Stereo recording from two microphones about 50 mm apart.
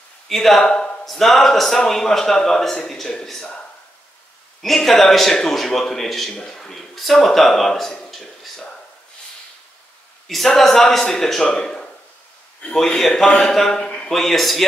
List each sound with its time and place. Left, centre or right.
0.3 s a man's voice: centre
4.6 s speech: centre
10.2 s speech: centre
11.4 s a sound: centre
12.7 s a man's voice: centre
13.8 s a sound: left
14.1 s speech: centre